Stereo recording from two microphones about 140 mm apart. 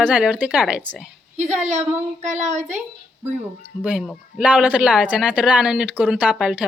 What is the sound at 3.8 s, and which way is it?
Speech, 10° right (ahead or behind).